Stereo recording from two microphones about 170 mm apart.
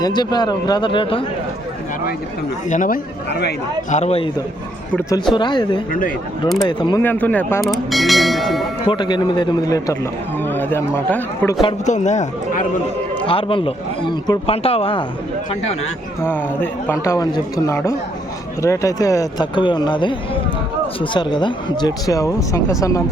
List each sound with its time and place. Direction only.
0.0 s speech: 25° left (ahead or behind)
2.6 s a man's voice: 50° left (ahead or behind)
4.9 s speech: 20° left (ahead or behind)
7.0 s a man's voice: 10° left (ahead or behind)
7.7 s bell: centre (ahead or behind)
8.9 s a man's voice: 25° left (ahead or behind)
11.9 s speech: 45° left (ahead or behind)
13.2 s a man's voice: 30° left (ahead or behind)
16.2 s a man's voice: 10° left (ahead or behind)